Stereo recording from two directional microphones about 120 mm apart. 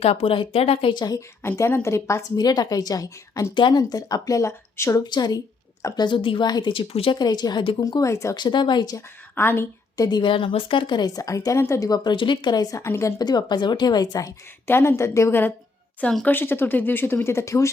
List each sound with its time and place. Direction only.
0.0 s speech: 55° left (ahead or behind)
0.9 s a woman's voice: 35° left (ahead or behind)
1.4 s a woman's voice: 20° left (ahead or behind)
2.3 s a woman's voice: 35° left (ahead or behind)
3.5 s a woman's voice: 40° left (ahead or behind)
7.2 s a woman's voice: 35° left (ahead or behind)
8.4 s a woman's voice: 40° left (ahead or behind)
9.0 s a woman's voice: 20° left (ahead or behind)
10.0 s a woman's voice: 40° left (ahead or behind)